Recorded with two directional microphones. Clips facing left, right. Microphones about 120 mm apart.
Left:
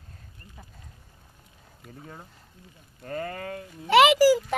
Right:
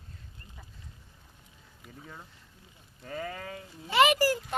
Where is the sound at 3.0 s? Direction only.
45° left (ahead or behind).